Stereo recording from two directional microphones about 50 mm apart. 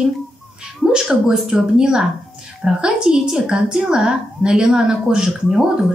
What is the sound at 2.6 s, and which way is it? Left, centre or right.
A woman's voice, centre.